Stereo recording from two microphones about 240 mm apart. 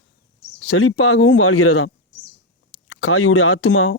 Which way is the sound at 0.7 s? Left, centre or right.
Left.